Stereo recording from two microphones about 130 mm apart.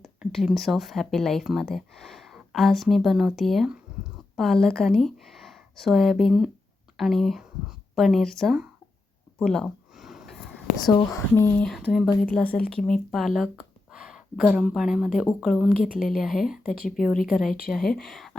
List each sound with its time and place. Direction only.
0.2 s speech: 5° right (ahead or behind)
9.4 s a sound: 5° left (ahead or behind)
11.1 s speech: 20° left (ahead or behind)
11.9 s speech: centre (ahead or behind)
12.2 s speech: 10° left (ahead or behind)